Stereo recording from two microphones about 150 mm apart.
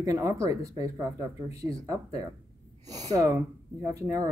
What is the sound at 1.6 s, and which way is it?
Speech, 20° right (ahead or behind).